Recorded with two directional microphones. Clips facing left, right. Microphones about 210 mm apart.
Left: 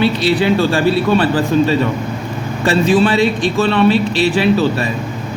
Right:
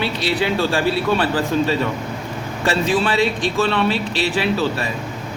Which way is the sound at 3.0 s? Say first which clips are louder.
Left 5 dB; 5° right (ahead or behind).